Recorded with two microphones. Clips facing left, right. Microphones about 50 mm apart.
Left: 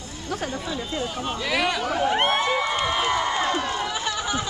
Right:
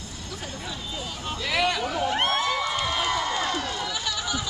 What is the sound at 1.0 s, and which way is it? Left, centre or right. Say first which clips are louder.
Speech: left 4 dB; centre.